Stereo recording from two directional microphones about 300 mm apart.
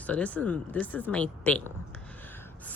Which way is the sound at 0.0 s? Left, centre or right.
Centre.